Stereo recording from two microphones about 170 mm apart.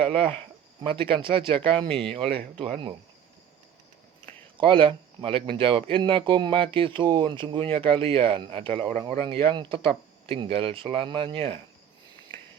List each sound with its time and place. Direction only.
0.0 s speech: 35° right (ahead or behind)
4.5 s speech: 30° right (ahead or behind)